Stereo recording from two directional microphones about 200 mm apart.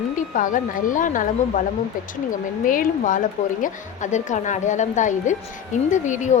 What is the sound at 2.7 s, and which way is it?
A woman's voice, 40° left (ahead or behind).